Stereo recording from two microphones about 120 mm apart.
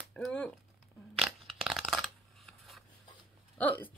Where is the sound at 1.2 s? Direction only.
Centre (ahead or behind).